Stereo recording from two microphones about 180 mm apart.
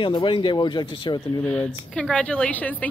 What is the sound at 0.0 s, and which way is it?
Speech, 25° left (ahead or behind).